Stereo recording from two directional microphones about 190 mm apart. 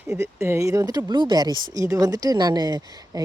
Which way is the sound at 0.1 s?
15° right (ahead or behind).